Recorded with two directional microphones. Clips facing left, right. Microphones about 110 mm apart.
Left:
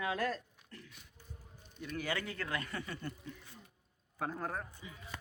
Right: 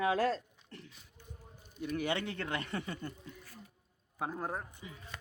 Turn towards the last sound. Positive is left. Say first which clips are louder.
# right 1 dB
turn(degrees=-20)  # may be behind; listen again after turning